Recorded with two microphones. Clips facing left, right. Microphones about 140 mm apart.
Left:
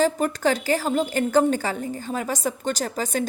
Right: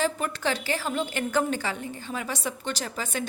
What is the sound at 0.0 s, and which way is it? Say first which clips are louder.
A woman's voice: left 6 dB; 40° left (ahead or behind).